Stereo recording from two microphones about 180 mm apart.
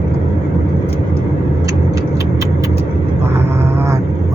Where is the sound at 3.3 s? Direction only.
15° right (ahead or behind).